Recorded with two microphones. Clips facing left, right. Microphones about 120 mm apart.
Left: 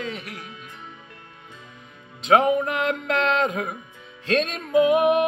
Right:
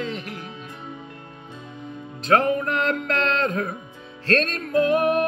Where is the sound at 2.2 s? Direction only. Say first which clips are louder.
Left 2 dB; 15° left (ahead or behind).